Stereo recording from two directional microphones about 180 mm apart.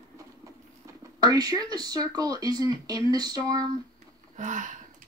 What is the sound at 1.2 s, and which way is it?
Speech, 20° right (ahead or behind).